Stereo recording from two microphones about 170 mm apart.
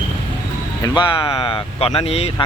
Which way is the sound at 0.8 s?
20° left (ahead or behind).